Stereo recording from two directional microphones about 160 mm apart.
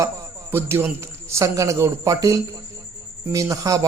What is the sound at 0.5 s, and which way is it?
A man's voice, 15° right (ahead or behind).